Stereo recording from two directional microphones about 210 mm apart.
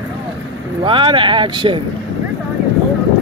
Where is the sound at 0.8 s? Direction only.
25° right (ahead or behind).